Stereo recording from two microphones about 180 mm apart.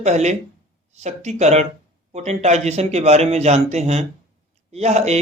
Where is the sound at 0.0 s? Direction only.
40° right (ahead or behind).